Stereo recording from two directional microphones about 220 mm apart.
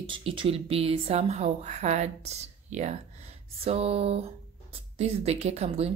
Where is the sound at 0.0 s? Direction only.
25° right (ahead or behind).